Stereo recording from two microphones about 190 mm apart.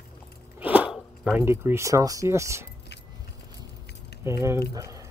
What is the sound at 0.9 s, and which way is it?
Dog, centre (ahead or behind).